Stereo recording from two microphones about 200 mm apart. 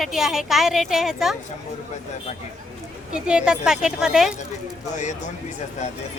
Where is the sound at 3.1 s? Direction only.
5° right (ahead or behind).